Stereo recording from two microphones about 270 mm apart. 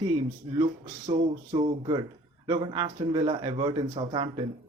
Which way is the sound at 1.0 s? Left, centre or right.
Centre.